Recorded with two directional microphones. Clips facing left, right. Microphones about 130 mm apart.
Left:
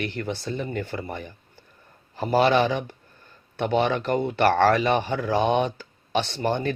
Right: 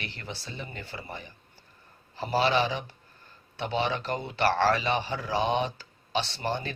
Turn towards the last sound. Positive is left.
turn(degrees=50)  # may be behind; listen again after turning